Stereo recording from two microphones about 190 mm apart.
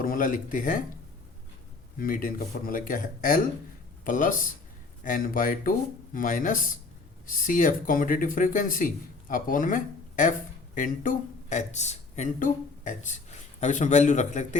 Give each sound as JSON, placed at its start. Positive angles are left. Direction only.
{"t": 0.0, "sound": "speech", "side_deg": 45}
{"t": 2.0, "sound": "a man's voice", "side_deg": 45}